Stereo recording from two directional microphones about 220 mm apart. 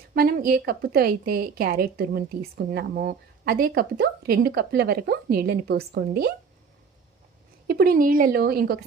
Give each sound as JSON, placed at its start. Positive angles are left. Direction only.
{"t": 0.1, "sound": "a woman's voice", "side_deg": -40}
{"t": 7.7, "sound": "a woman's voice", "side_deg": -45}